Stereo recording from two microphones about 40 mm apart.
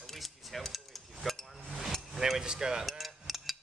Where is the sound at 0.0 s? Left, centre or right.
Centre.